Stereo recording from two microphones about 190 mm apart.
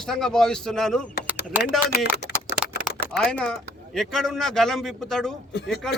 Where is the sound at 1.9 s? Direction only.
50° left (ahead or behind).